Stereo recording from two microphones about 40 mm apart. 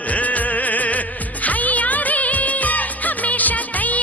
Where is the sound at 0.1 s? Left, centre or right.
Left.